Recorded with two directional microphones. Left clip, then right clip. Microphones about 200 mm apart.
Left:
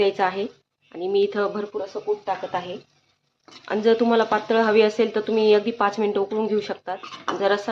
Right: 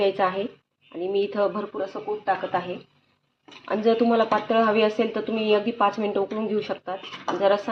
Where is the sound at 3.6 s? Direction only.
15° left (ahead or behind).